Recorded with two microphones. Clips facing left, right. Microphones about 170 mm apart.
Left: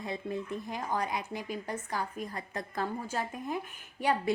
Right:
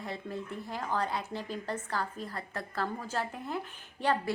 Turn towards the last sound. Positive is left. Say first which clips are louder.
# even
turn(degrees=10)  # may be behind; listen again after turning